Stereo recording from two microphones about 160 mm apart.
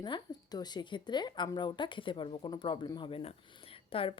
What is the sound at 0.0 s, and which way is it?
Speech, 25° left (ahead or behind).